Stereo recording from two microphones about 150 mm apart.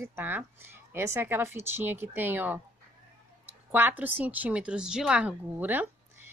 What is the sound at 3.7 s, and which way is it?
A woman's voice, 10° right (ahead or behind).